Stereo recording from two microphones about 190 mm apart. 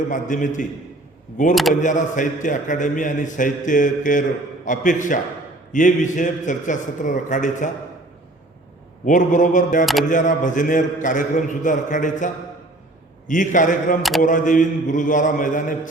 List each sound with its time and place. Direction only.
0.1 s a man's voice: 40° left (ahead or behind)
9.0 s a man's voice: 40° left (ahead or behind)
9.8 s single-lens reflex camera: centre (ahead or behind)
10.1 s a man's voice: 40° left (ahead or behind)